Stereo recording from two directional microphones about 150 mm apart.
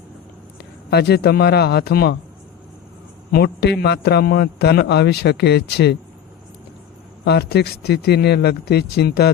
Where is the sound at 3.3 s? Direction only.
90° left.